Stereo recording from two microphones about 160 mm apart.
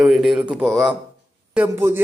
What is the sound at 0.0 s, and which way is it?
Speech, centre (ahead or behind).